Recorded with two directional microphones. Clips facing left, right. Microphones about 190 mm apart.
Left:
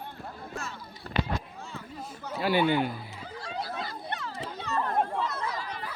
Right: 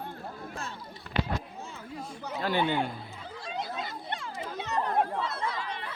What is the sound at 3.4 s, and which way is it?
Chatter, 20° right (ahead or behind).